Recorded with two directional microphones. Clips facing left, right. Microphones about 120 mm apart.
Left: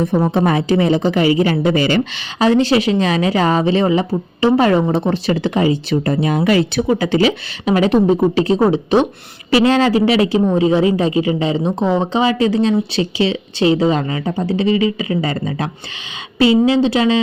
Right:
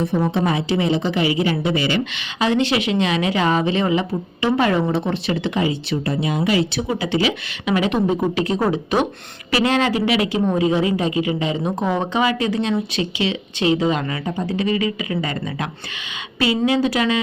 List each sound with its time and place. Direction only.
0.3 s speech: 50° left (ahead or behind); by 17.2 s 25° left (ahead or behind)